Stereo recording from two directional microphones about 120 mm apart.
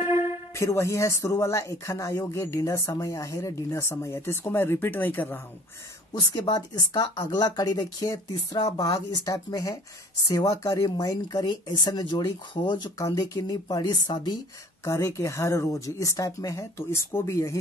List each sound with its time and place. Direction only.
0.6 s speech: 25° left (ahead or behind)
6.1 s speech: 35° left (ahead or behind)
14.9 s speech: 25° left (ahead or behind)